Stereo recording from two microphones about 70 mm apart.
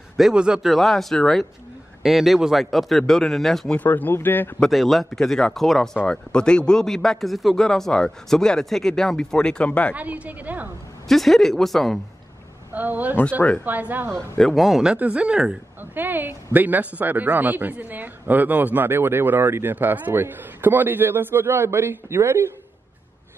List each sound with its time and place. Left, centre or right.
0.2 s speech: centre
2.0 s speech: centre
3.7 s speech: left
4.6 s speech: centre
6.0 s a man's voice: centre
9.9 s a woman's voice: right
11.1 s speech: centre
12.7 s a woman's voice: right
14.4 s speech: centre
15.8 s a woman's voice: right